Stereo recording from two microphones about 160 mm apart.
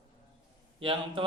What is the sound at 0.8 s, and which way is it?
Speech, 35° right (ahead or behind).